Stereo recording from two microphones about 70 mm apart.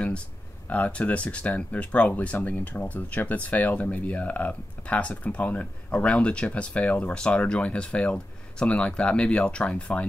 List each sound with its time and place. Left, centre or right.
0.7 s speech: centre